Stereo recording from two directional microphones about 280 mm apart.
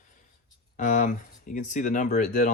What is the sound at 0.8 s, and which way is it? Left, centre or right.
Speech, left.